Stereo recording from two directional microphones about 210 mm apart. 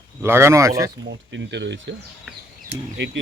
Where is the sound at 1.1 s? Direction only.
55° right (ahead or behind).